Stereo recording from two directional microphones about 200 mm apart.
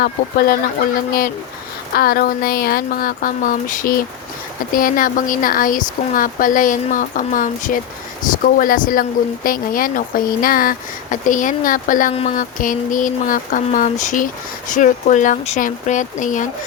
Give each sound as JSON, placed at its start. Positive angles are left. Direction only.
{"t": 0.0, "sound": "speech", "side_deg": 45}
{"t": 2.0, "sound": "speech", "side_deg": 50}